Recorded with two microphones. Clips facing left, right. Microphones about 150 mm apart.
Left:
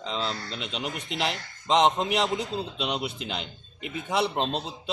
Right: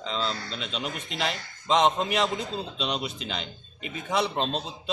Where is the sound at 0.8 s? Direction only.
65° left (ahead or behind).